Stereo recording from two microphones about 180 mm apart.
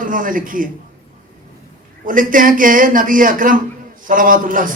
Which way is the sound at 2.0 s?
50° right (ahead or behind).